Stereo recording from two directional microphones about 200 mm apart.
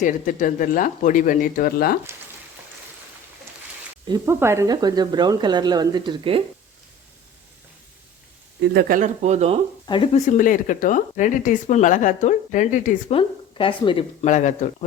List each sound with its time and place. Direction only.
0.0 s speech: 40° left (ahead or behind)
4.0 s speech: 15° right (ahead or behind)
8.7 s speech: 40° right (ahead or behind)
9.8 s speech: 25° left (ahead or behind)
10.2 s speech: 40° left (ahead or behind)
13.1 s speech: 25° left (ahead or behind)